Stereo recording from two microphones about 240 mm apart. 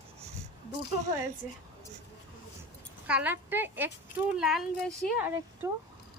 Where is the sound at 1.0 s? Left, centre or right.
Centre.